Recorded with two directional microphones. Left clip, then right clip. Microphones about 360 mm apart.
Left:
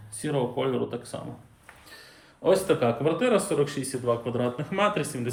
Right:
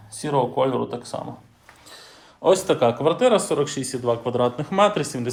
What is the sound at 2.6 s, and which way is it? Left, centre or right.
Speech, centre.